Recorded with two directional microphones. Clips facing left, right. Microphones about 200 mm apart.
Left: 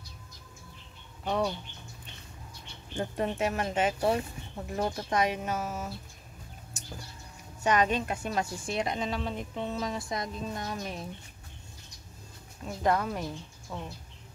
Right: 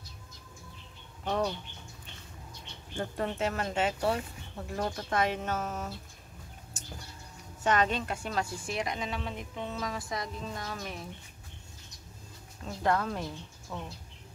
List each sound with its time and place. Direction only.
1.2 s speech: 10° left (ahead or behind)
3.0 s speech: 15° left (ahead or behind)
7.6 s a woman's voice: 15° left (ahead or behind)
12.6 s speech: 15° left (ahead or behind)